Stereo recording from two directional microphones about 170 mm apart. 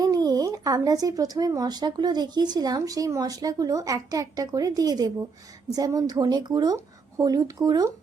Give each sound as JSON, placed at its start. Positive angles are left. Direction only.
{"t": 0.0, "sound": "speech", "side_deg": -20}